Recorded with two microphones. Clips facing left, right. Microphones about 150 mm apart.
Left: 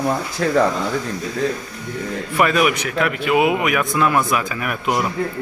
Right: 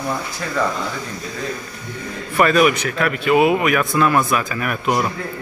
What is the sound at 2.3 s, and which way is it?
A man's voice, 10° left (ahead or behind).